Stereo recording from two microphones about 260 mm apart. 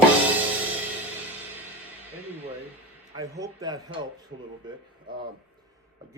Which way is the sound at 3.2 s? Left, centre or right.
Centre.